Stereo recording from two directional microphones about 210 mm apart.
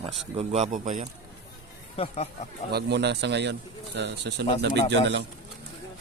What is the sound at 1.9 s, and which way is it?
Speech, 30° left (ahead or behind).